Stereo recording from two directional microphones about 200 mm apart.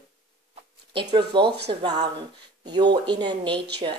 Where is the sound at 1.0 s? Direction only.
25° right (ahead or behind).